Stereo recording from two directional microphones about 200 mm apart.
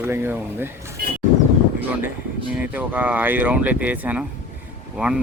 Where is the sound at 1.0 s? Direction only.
55° right (ahead or behind).